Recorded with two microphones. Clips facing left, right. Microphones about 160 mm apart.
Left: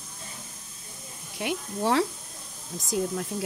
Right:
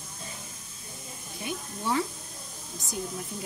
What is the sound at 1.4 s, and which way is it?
Speech, 85° left.